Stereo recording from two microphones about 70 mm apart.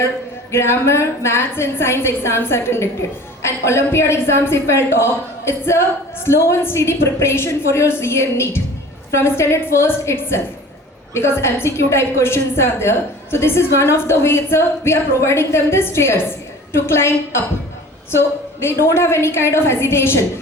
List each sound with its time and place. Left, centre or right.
0.5 s a woman's voice: left